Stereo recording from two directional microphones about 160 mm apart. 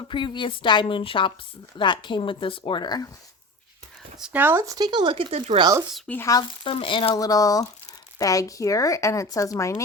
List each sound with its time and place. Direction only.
0.1 s a woman's voice: 30° left (ahead or behind)
4.2 s speech: 10° right (ahead or behind); by 5.6 s 35° right (ahead or behind)
6.1 s speech: 15° left (ahead or behind)
6.7 s speech: 35° left (ahead or behind)